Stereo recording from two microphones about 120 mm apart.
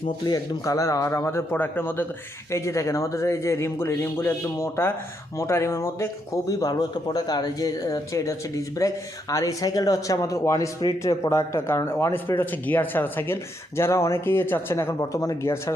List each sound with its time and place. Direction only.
0.3 s speech: 30° left (ahead or behind)